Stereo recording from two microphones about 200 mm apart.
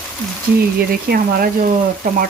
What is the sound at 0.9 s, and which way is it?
Frying, 50° right (ahead or behind).